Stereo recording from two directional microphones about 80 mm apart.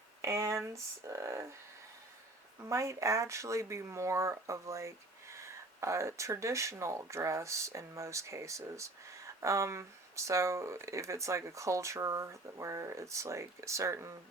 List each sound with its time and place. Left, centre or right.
0.2 s a sound: right
1.0 s speech: right
2.6 s speech: right